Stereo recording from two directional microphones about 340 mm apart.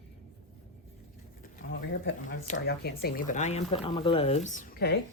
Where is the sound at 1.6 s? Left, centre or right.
Left.